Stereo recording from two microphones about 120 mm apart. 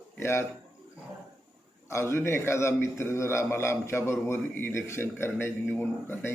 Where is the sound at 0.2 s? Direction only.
20° left (ahead or behind).